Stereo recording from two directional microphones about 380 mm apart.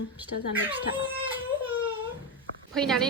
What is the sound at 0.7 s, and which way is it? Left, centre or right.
Speech, centre.